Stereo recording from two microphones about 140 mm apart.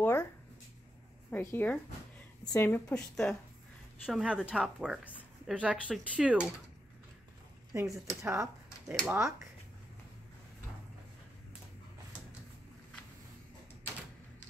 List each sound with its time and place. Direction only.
1.3 s a woman's voice: 15° left (ahead or behind)
4.0 s speech: 5° right (ahead or behind)
7.7 s speech: 20° right (ahead or behind)